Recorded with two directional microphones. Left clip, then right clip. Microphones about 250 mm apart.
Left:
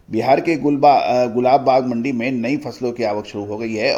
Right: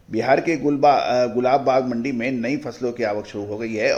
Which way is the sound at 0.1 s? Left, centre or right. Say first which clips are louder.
Left 3 dB; left.